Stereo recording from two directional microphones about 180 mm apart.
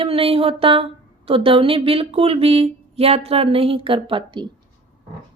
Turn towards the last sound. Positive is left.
turn(degrees=-25)  # may be behind; listen again after turning